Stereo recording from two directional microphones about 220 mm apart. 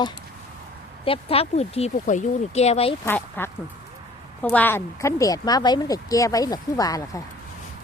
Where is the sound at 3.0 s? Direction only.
10° left (ahead or behind).